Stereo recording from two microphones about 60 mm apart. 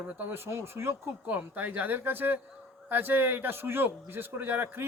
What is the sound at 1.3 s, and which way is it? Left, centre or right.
A man's voice, right.